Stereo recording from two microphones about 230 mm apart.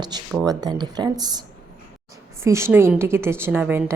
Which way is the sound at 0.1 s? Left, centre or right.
Centre.